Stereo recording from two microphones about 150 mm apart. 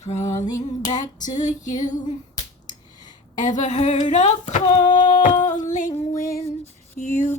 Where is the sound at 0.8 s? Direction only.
55° left (ahead or behind).